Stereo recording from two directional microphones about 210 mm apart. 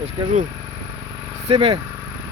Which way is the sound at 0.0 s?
30° right (ahead or behind).